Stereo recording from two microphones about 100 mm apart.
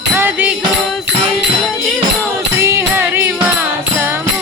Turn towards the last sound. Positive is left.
turn(degrees=-20)  # may be behind; listen again after turning